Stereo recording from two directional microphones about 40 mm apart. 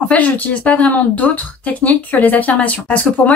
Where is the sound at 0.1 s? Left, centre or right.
Left.